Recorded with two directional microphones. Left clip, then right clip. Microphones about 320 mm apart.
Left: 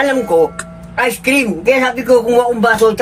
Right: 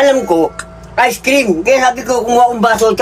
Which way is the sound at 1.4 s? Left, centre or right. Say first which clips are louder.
Right 3 dB; centre.